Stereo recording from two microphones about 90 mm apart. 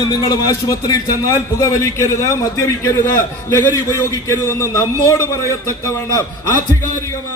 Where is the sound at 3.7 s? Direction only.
35° left (ahead or behind).